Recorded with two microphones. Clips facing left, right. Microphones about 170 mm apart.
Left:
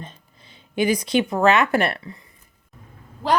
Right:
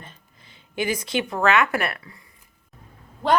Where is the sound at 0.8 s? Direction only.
20° left (ahead or behind).